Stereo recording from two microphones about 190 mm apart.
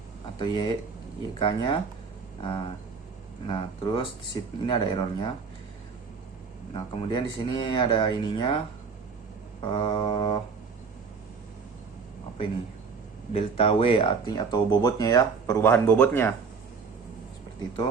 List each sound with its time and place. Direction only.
0.3 s speech: 25° left (ahead or behind)
6.7 s speech: 25° left (ahead or behind)
9.6 s speech: 25° left (ahead or behind)
13.3 s speech: 30° left (ahead or behind); by 16.3 s 10° left (ahead or behind)